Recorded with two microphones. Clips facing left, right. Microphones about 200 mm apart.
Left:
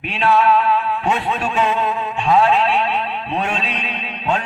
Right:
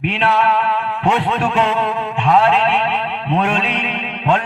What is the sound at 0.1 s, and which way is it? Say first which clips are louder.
Music: left 3 dB; 60° right (ahead or behind).